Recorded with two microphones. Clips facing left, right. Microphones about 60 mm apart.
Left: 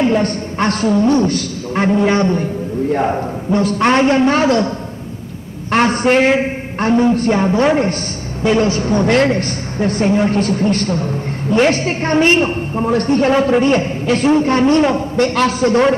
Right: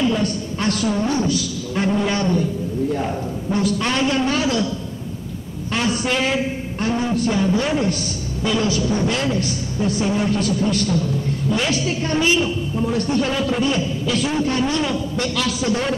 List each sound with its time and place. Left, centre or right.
0.0 s a woman's voice: left